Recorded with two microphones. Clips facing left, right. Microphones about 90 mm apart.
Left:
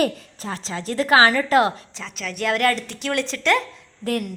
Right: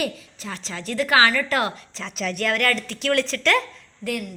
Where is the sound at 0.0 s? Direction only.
35° left (ahead or behind).